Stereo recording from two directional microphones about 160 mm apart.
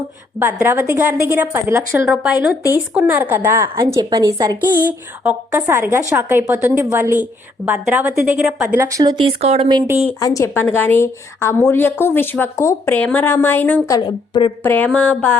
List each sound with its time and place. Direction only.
0.3 s a woman's voice: 15° right (ahead or behind)
4.9 s a woman's voice: 10° right (ahead or behind)
8.6 s speech: 15° right (ahead or behind); by 9.6 s 40° right (ahead or behind)
10.2 s speech: 20° left (ahead or behind)
13.8 s speech: 25° left (ahead or behind)
14.6 s speech: 10° left (ahead or behind)